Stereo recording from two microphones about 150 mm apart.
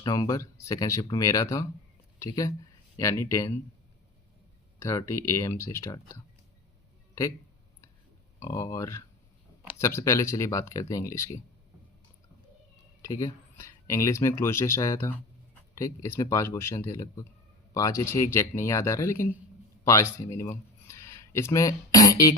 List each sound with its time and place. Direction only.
0.0 s speech: 25° left (ahead or behind)
4.8 s speech: 20° left (ahead or behind)
8.4 s speech: 20° left (ahead or behind)
13.0 s speech: 20° left (ahead or behind)
20.8 s a sound: 20° left (ahead or behind)